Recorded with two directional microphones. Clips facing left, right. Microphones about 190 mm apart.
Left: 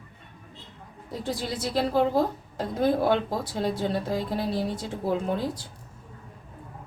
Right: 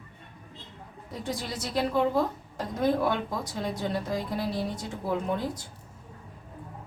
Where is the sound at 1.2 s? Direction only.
30° left (ahead or behind).